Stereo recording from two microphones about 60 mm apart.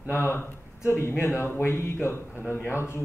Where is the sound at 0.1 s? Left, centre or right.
Left.